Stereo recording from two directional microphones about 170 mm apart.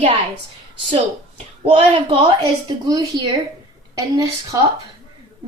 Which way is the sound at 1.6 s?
35° right (ahead or behind).